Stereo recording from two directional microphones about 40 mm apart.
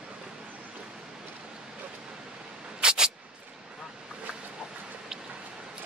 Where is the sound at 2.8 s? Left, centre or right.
Centre.